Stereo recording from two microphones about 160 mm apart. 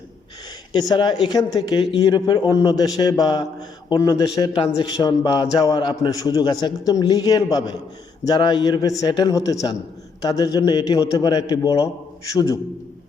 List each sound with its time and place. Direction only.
0.7 s a man's voice: 25° left (ahead or behind)